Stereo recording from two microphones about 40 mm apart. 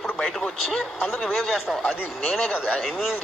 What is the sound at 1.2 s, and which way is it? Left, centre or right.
A man's voice, centre.